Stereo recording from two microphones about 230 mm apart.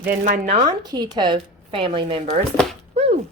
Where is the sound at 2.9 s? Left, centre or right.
Right.